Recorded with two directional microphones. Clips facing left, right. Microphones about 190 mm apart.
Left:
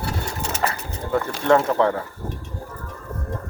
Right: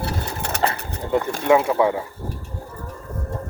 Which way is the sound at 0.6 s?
25° right (ahead or behind).